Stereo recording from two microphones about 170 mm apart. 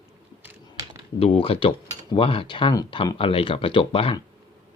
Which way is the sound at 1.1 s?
35° left (ahead or behind).